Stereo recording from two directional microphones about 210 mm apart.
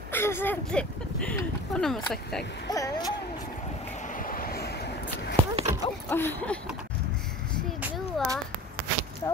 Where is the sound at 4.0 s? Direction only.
40° left (ahead or behind).